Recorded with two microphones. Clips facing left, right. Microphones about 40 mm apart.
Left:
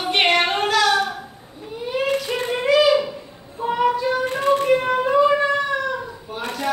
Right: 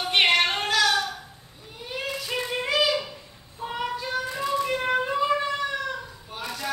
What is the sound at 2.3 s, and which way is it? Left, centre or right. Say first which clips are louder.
Child singing: left 6 dB; left.